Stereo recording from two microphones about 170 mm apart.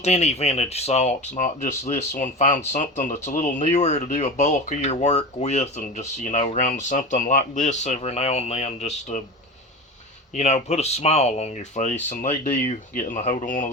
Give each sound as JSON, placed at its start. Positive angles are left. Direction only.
{"t": 0.0, "sound": "speech", "side_deg": 40}
{"t": 10.3, "sound": "speech", "side_deg": 45}